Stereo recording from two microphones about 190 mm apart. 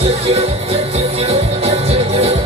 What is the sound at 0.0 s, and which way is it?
Music, 30° right (ahead or behind).